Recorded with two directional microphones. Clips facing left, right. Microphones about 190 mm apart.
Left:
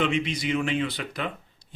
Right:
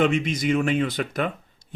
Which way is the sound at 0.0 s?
45° right (ahead or behind).